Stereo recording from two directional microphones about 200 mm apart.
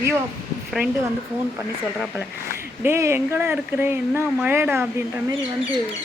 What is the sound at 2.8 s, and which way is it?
Speech, 15° right (ahead or behind).